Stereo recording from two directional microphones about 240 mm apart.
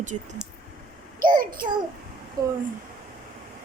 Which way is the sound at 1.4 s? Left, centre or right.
Right.